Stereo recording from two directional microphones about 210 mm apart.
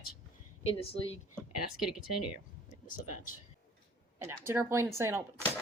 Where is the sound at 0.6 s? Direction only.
30° left (ahead or behind).